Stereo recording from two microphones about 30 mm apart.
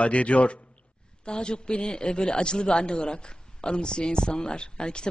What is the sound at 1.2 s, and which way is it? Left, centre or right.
Speech, left.